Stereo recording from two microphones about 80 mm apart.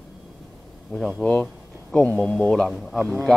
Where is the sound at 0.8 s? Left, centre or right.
Centre.